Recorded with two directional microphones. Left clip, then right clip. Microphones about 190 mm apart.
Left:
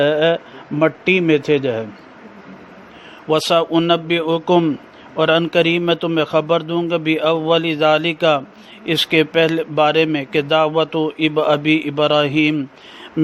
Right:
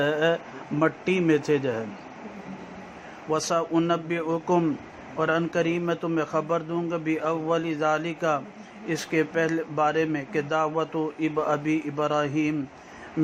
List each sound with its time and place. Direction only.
0.0 s speech: 35° left (ahead or behind)
3.2 s a man's voice: 40° left (ahead or behind)
8.9 s a man's voice: 55° left (ahead or behind)